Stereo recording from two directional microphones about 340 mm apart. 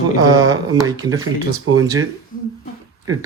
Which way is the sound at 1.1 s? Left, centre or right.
Right.